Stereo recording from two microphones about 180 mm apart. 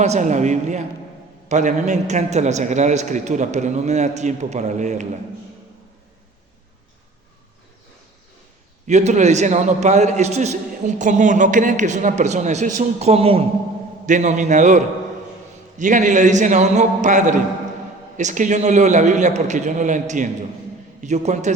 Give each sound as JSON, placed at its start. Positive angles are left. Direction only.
{"t": 0.0, "sound": "a man's voice", "side_deg": -40}
{"t": 8.9, "sound": "a man's voice", "side_deg": -40}